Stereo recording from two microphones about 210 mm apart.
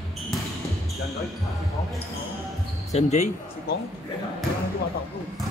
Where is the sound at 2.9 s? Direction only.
35° left (ahead or behind).